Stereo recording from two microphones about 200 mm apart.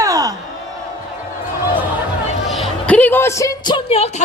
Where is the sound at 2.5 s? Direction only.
Centre (ahead or behind); by 4.2 s 30° left (ahead or behind).